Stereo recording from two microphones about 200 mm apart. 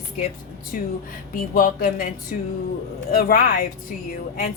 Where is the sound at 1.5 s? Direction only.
45° left (ahead or behind).